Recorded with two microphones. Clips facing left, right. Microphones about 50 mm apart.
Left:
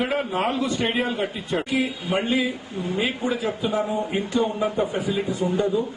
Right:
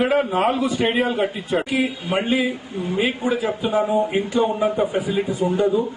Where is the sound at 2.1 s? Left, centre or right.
Right.